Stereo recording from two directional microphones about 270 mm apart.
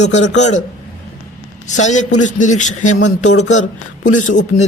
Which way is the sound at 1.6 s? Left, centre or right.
Left.